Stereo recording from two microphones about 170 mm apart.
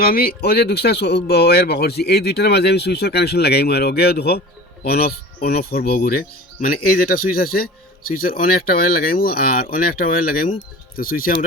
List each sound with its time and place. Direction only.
0.0 s speech: 60° left (ahead or behind)